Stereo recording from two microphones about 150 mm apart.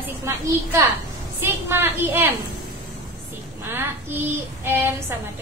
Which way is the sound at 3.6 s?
15° right (ahead or behind).